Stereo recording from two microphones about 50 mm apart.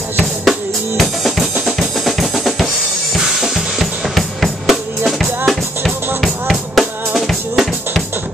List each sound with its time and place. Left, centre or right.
0.5 s drum kit: centre
5.5 s music: centre
7.2 s drum: centre